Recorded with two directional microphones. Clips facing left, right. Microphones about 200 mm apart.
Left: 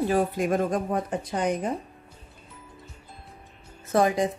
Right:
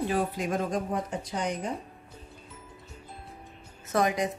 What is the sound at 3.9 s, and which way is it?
Speech, 30° left (ahead or behind).